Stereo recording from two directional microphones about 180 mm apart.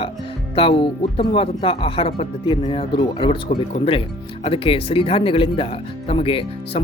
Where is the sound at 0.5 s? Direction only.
30° left (ahead or behind).